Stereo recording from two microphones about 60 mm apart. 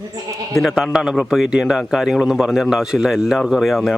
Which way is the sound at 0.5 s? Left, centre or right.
Centre.